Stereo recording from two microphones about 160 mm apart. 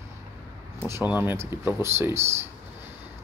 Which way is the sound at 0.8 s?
10° right (ahead or behind).